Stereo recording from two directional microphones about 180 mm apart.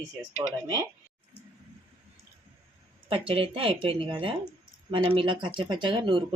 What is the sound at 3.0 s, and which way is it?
Speech, 30° right (ahead or behind).